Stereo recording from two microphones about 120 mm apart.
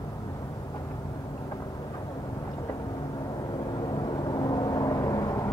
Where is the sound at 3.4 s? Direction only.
35° left (ahead or behind).